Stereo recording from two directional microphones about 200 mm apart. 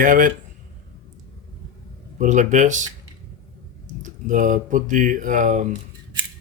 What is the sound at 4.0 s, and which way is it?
Speech, 40° right (ahead or behind).